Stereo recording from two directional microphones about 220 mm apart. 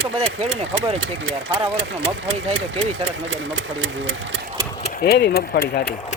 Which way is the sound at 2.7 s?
30° right (ahead or behind).